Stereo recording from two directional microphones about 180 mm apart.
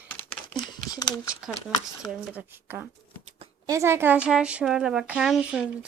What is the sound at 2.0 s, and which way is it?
Speech, 10° right (ahead or behind).